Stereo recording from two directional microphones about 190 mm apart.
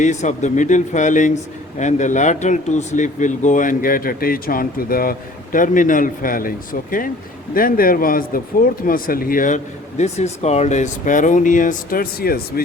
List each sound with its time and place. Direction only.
0.0 s a man's voice: 40° left (ahead or behind)
7.5 s speech: 50° left (ahead or behind)
10.0 s speech: 35° left (ahead or behind); by 12.6 s 50° left (ahead or behind)